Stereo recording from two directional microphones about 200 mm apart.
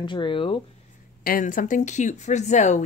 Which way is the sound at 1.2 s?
45° left (ahead or behind).